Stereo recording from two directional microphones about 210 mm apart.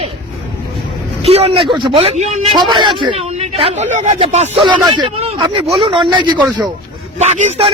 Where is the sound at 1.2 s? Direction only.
30° right (ahead or behind).